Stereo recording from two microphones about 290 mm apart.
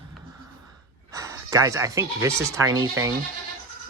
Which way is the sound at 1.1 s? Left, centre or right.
Centre.